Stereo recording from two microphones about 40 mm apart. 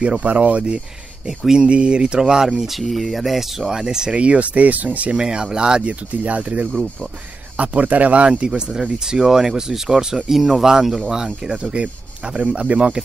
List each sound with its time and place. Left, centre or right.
0.2 s speech: right
1.2 s speech: centre
1.7 s speech: right
4.1 s speech: right
5.1 s speech: centre
6.2 s speech: right; by 11.0 s centre
11.5 s speech: right